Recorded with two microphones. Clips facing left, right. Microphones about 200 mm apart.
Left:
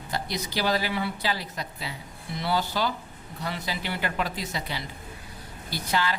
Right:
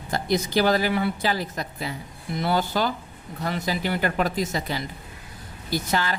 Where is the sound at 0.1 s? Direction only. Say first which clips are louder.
Right 8 dB; 50° right (ahead or behind).